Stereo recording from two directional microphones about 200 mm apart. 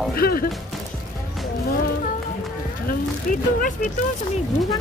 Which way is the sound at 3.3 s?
40° left (ahead or behind).